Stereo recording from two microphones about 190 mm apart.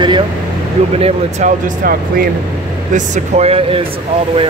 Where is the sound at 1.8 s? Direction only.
50° right (ahead or behind).